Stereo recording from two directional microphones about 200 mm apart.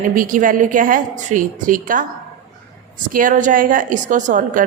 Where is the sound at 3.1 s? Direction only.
40° right (ahead or behind).